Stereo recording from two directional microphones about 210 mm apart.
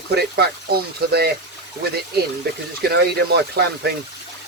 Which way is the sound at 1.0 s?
50° right (ahead or behind).